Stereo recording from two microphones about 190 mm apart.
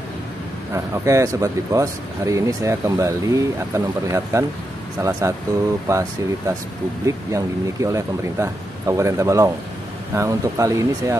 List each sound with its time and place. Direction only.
0.7 s speech: 15° right (ahead or behind)
5.9 s speech: 15° right (ahead or behind)